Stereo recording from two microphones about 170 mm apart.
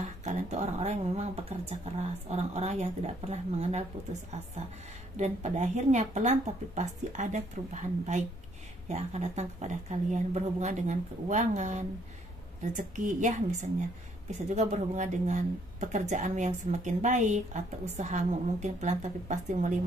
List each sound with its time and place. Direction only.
0.0 s speech: 45° right (ahead or behind)